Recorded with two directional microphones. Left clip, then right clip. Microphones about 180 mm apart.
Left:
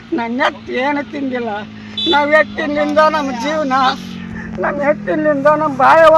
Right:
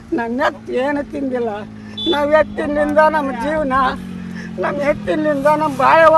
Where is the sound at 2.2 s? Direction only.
25° right (ahead or behind).